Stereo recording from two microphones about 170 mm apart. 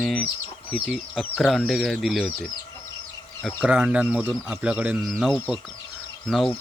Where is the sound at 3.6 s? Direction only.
5° right (ahead or behind).